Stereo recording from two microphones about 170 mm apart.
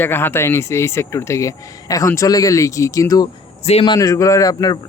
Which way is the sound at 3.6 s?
30° left (ahead or behind).